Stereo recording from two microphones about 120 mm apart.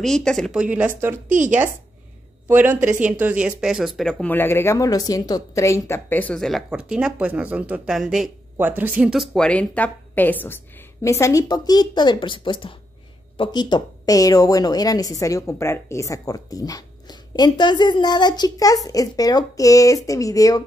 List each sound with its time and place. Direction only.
0.0 s speech: 5° left (ahead or behind)
0.5 s speech: 10° right (ahead or behind)
2.4 s speech: 15° right (ahead or behind); by 4.3 s 5° left (ahead or behind)
4.3 s a woman's voice: 15° left (ahead or behind)
6.4 s speech: centre (ahead or behind)
8.5 s speech: 15° right (ahead or behind)
9.1 s a woman's voice: centre (ahead or behind); by 20.6 s 30° left (ahead or behind)